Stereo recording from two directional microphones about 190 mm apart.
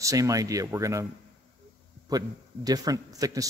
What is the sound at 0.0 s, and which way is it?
A man's voice, 15° right (ahead or behind).